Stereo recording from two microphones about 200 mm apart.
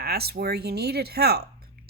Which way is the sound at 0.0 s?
50° right (ahead or behind).